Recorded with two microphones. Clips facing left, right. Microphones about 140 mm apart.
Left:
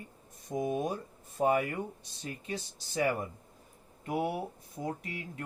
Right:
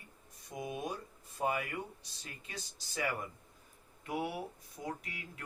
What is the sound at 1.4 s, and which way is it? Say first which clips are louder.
Speech: left 7 dB; 35° left (ahead or behind).